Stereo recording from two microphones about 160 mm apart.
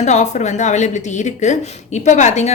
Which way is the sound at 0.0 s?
45° left (ahead or behind).